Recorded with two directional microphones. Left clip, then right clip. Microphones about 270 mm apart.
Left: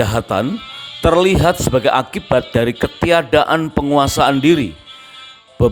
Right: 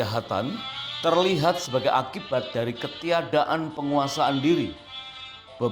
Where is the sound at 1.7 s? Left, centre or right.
Left.